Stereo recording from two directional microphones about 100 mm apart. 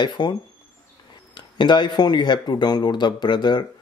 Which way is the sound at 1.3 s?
50° left (ahead or behind).